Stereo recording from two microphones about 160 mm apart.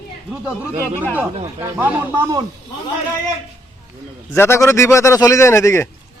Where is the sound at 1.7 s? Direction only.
10° right (ahead or behind).